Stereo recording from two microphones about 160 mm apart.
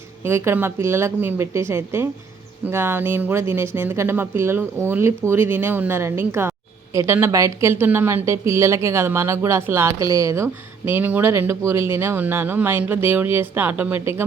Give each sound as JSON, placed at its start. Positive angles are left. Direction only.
{"t": 0.3, "sound": "a woman's voice", "side_deg": -15}